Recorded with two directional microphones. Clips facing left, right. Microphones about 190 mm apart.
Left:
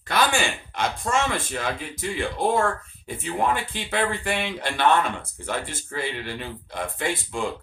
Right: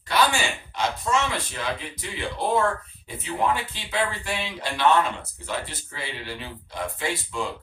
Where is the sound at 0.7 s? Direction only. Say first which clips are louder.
Even; 50° left (ahead or behind).